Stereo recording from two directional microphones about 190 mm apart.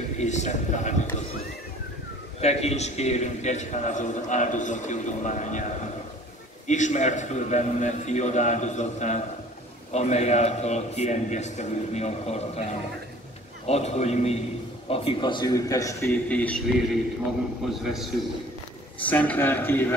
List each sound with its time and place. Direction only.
0.2 s a man's voice: 40° left (ahead or behind)
2.4 s a man's voice: 35° left (ahead or behind)
6.7 s a man's voice: 40° left (ahead or behind); by 20.0 s 10° left (ahead or behind)